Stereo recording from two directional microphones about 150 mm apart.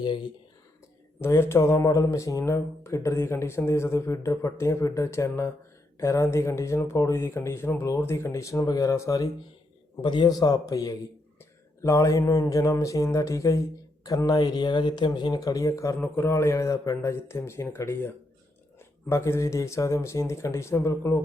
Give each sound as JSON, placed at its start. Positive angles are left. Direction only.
{"t": 0.0, "sound": "speech", "side_deg": 30}
{"t": 1.2, "sound": "speech", "side_deg": 15}